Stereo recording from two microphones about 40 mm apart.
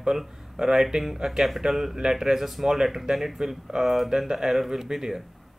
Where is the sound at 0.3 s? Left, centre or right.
Centre.